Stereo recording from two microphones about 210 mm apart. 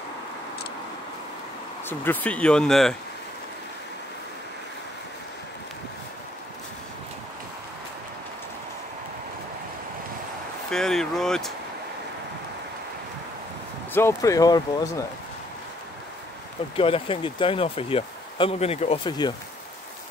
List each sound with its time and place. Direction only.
1.9 s speech: 10° left (ahead or behind)
10.7 s speech: centre (ahead or behind)
13.9 s speech: 15° left (ahead or behind)
16.7 s speech: 25° left (ahead or behind)